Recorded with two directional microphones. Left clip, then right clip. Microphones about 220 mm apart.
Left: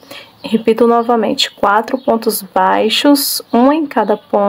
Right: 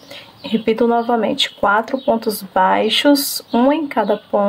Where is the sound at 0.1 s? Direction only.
15° left (ahead or behind).